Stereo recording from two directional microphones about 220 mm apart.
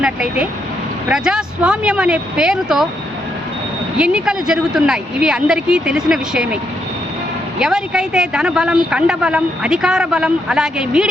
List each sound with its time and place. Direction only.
0.0 s a woman's voice: 5° right (ahead or behind)
3.9 s a woman's voice: 5° right (ahead or behind)
7.6 s a woman's voice: centre (ahead or behind)